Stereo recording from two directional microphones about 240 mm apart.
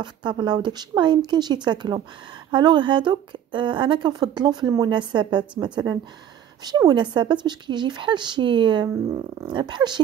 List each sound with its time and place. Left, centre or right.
0.0 s speech: centre